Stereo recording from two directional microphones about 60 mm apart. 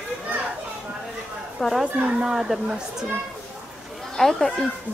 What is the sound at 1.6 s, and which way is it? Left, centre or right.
Speech, centre.